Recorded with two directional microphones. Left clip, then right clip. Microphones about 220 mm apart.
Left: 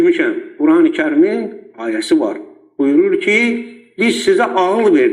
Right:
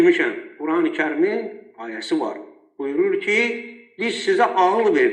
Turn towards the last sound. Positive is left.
turn(degrees=40)  # may be behind; listen again after turning